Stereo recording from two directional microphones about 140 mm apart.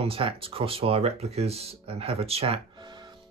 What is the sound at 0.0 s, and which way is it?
Speech, 40° right (ahead or behind).